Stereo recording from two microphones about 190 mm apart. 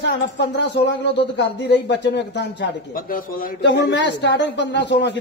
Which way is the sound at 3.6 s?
65° left (ahead or behind).